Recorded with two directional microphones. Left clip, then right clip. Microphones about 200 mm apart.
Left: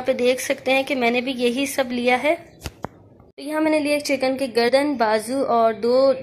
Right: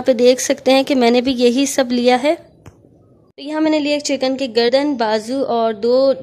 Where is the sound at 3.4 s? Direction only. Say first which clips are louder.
Right 3 dB; 30° right (ahead or behind).